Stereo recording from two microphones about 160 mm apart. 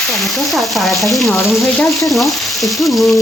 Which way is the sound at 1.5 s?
Centre (ahead or behind).